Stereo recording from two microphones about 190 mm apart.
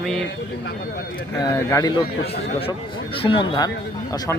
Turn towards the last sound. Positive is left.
turn(degrees=25)  # may be behind; listen again after turning